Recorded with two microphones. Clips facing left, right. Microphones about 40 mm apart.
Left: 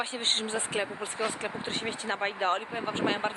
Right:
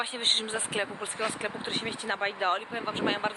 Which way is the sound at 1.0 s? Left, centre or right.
Right.